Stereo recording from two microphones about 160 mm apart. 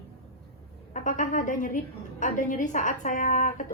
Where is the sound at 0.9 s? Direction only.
50° left (ahead or behind).